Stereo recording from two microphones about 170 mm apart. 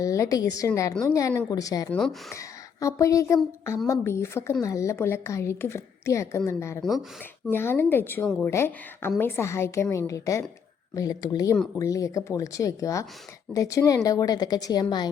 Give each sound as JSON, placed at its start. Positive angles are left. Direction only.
{"t": 0.0, "sound": "a woman's voice", "side_deg": 20}
{"t": 1.9, "sound": "speech", "side_deg": 5}
{"t": 2.3, "sound": "a woman's voice", "side_deg": 20}